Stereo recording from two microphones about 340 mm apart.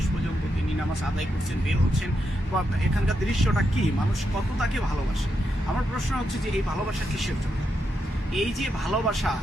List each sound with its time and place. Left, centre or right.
8.4 s speech: centre